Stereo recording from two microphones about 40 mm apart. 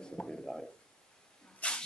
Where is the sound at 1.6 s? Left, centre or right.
Left.